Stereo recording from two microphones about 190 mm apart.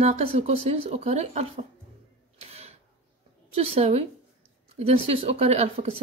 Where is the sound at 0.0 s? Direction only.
35° right (ahead or behind).